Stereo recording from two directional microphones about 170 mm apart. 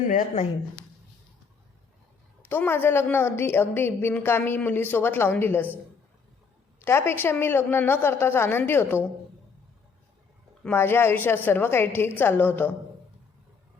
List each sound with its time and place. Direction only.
0.1 s speech: 50° left (ahead or behind)
2.4 s a woman's voice: 10° left (ahead or behind)
6.7 s a woman's voice: 15° left (ahead or behind)
10.6 s a woman's voice: 10° left (ahead or behind)